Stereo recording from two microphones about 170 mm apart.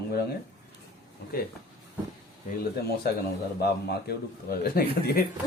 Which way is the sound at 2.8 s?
75° left (ahead or behind).